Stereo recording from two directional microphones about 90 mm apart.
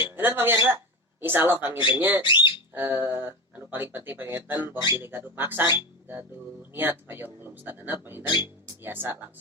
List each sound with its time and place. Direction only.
0.0 s speech: 25° right (ahead or behind)
2.2 s speech: 60° left (ahead or behind)
2.7 s speech: 25° right (ahead or behind)